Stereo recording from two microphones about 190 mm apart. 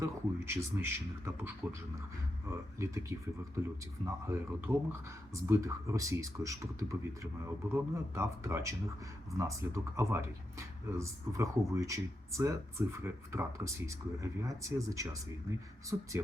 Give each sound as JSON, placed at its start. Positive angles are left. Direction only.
{"t": 0.0, "sound": "speech", "side_deg": -15}